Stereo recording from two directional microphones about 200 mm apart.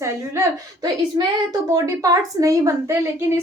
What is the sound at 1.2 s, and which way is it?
A woman's voice, 20° right (ahead or behind).